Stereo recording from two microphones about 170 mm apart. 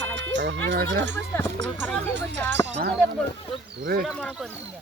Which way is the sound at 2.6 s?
90° right.